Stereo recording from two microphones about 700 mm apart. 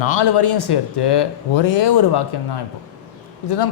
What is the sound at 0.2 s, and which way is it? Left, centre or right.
Speech, left.